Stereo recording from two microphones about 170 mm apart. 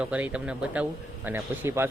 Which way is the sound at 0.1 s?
5° right (ahead or behind).